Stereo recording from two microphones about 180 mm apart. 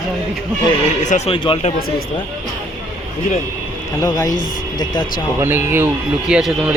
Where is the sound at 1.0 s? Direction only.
40° left (ahead or behind).